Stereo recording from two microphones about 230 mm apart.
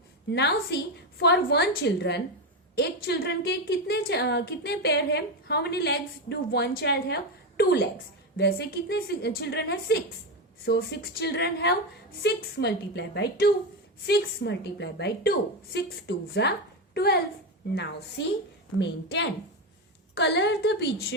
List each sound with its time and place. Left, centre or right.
0.3 s a woman's voice: left
18.8 s a woman's voice: left